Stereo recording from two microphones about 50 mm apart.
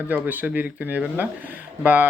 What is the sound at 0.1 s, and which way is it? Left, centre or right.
Speech, right.